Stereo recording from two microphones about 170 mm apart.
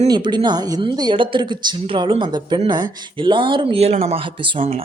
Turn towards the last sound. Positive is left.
turn(degrees=-30)  # may be behind; listen again after turning